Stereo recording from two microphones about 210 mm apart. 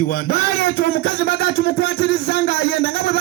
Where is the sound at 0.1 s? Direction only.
45° left (ahead or behind).